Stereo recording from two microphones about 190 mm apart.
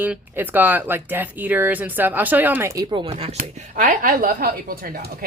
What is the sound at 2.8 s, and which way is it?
Speech, 25° right (ahead or behind).